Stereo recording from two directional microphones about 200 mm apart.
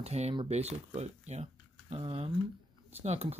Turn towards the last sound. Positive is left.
turn(degrees=-30)  # may be behind; listen again after turning